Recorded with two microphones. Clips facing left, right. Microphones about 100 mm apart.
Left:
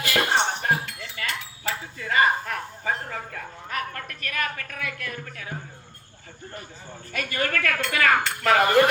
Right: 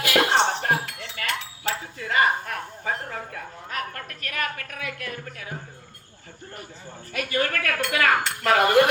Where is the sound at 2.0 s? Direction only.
45° right (ahead or behind).